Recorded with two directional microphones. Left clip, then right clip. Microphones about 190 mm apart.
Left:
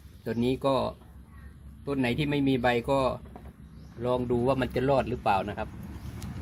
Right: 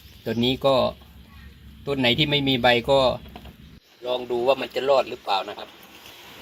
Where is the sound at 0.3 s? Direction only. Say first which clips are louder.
Right 6 dB; 20° right (ahead or behind).